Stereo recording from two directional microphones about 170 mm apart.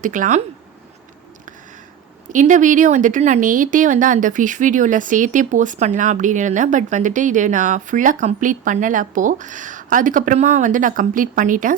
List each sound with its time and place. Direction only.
0.0 s speech: 50° right (ahead or behind)
2.3 s speech: 50° right (ahead or behind)